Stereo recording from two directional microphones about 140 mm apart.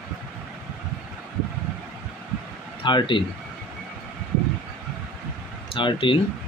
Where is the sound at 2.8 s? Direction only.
35° left (ahead or behind).